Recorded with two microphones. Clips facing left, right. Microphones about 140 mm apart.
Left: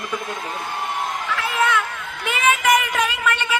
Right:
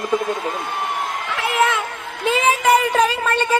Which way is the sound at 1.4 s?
25° right (ahead or behind).